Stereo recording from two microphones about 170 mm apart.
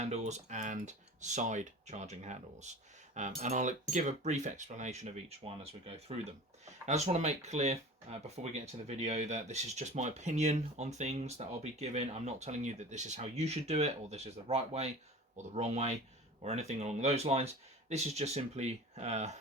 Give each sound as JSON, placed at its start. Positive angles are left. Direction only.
{"t": 0.0, "sound": "cutlery", "side_deg": -40}
{"t": 6.8, "sound": "speech", "side_deg": -45}